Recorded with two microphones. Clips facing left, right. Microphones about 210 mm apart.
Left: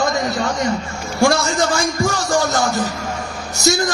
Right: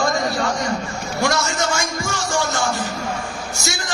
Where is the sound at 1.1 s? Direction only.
30° left (ahead or behind).